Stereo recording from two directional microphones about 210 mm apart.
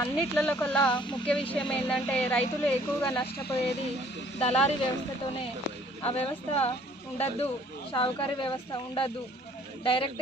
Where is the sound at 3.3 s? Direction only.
50° left (ahead or behind).